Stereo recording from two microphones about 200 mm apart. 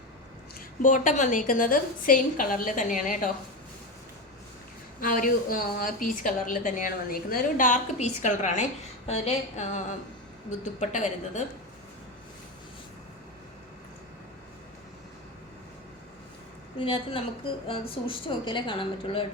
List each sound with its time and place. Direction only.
0.8 s a woman's voice: 40° left (ahead or behind)
4.9 s a woman's voice: 45° left (ahead or behind)
16.7 s a woman's voice: 25° left (ahead or behind)